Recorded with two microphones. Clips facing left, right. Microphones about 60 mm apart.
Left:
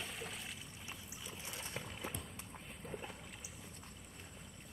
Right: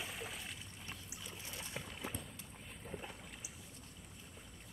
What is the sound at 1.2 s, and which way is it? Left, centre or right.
Boat, centre.